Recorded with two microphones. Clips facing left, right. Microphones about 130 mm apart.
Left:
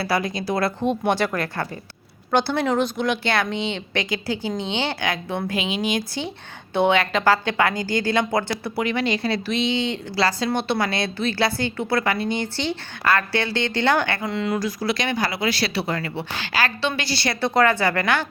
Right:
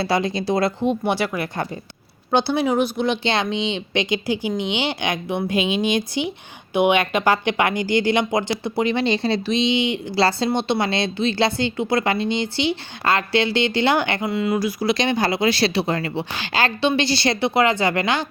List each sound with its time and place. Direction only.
0.0 s a woman's voice: 25° right (ahead or behind)
0.9 s a woman's voice: 10° right (ahead or behind)
10.2 s a woman's voice: 30° right (ahead or behind); by 14.9 s 10° right (ahead or behind)
14.9 s a woman's voice: 25° right (ahead or behind)
17.4 s speech: 15° right (ahead or behind)